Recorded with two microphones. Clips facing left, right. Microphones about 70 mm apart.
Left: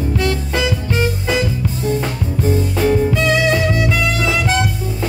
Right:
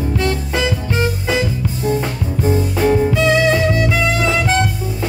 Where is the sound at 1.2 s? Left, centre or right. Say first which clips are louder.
Even; centre.